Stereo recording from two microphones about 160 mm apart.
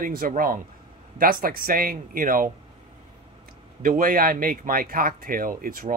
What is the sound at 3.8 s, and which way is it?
Speech, 60° right (ahead or behind).